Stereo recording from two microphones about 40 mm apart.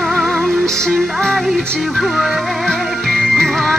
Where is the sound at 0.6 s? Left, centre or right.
Centre.